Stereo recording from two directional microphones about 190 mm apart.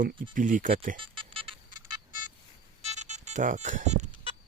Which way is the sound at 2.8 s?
35° right (ahead or behind).